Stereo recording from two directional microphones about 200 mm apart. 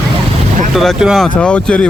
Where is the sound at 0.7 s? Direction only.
Centre (ahead or behind).